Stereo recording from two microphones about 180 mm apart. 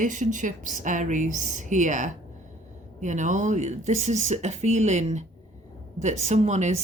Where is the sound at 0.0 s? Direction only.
45° right (ahead or behind).